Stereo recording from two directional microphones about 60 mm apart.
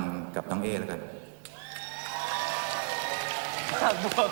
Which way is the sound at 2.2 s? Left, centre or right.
Left.